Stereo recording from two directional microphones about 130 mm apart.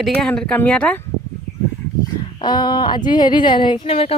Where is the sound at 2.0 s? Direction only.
35° left (ahead or behind); by 4.2 s 50° left (ahead or behind).